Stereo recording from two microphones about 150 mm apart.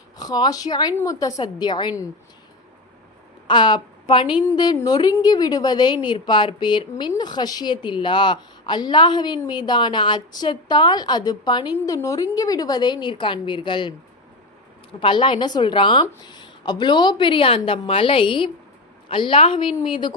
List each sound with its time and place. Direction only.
0.2 s a woman's voice: 25° left (ahead or behind)
3.4 s a woman's voice: 30° left (ahead or behind)
15.0 s a woman's voice: 35° left (ahead or behind)